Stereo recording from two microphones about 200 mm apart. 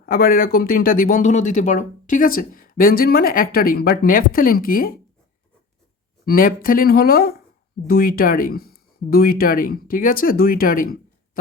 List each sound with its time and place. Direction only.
0.0 s speech: 45° left (ahead or behind)
6.2 s speech: 45° left (ahead or behind)